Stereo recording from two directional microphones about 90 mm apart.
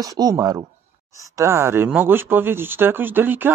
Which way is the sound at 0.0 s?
40° right (ahead or behind).